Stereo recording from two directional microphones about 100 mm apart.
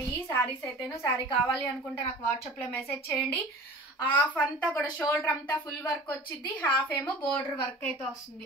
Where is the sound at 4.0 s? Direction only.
15° left (ahead or behind).